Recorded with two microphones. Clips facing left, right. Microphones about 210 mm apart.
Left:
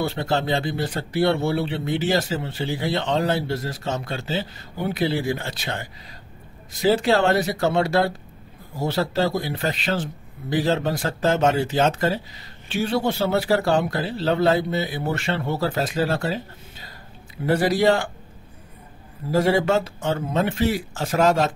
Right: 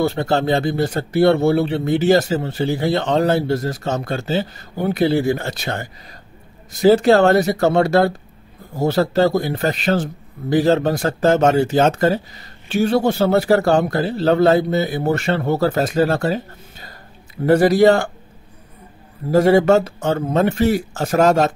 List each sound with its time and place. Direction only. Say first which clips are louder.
0.0 s speech: right 6 dB; 45° right (ahead or behind)
19.3 s speech: right 7 dB; 45° right (ahead or behind)